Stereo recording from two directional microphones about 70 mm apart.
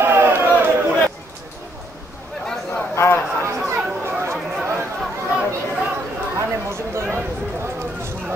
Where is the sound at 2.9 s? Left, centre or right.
Left.